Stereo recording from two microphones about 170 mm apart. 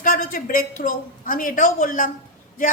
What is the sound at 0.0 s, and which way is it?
A woman's voice, 55° left (ahead or behind).